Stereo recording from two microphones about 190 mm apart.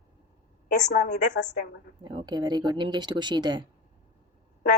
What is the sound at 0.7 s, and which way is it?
Speech, 40° left (ahead or behind).